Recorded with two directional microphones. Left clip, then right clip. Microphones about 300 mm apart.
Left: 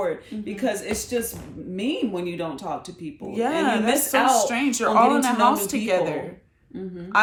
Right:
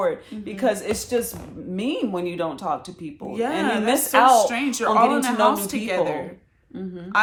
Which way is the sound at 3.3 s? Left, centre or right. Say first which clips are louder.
Left 1 dB; centre.